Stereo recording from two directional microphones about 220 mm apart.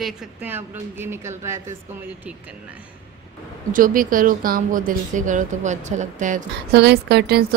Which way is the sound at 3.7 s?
40° right (ahead or behind).